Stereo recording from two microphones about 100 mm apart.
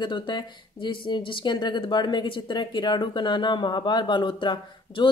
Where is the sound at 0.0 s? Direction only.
50° left (ahead or behind).